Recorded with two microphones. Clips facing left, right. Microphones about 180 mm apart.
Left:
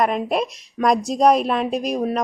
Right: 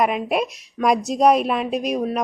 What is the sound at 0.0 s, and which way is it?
A woman's voice, 5° right (ahead or behind).